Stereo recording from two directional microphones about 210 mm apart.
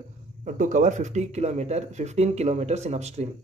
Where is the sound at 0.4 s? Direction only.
40° right (ahead or behind).